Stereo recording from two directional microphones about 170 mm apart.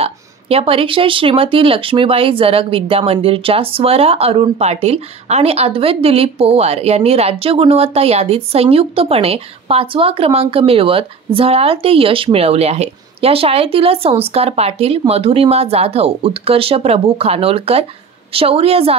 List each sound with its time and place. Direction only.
0.0 s speech: 35° right (ahead or behind)